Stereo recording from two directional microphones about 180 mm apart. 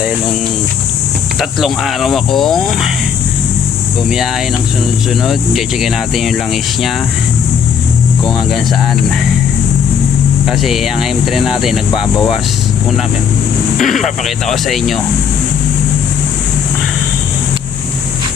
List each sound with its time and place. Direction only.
1.4 s speech: centre (ahead or behind)
5.2 s speech: centre (ahead or behind)
10.4 s speech: centre (ahead or behind)
11.9 s speech: 25° left (ahead or behind)
13.8 s speech: centre (ahead or behind)